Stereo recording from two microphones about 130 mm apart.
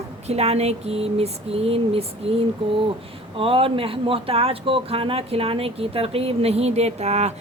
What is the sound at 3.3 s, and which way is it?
Speech, 45° right (ahead or behind).